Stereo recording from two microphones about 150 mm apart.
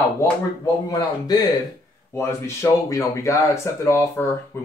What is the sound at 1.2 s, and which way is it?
Speech, 25° left (ahead or behind).